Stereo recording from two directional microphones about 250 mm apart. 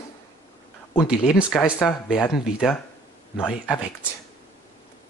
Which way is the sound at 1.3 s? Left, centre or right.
Centre.